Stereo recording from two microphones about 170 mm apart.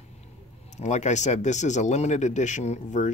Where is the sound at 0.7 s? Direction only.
45° left (ahead or behind).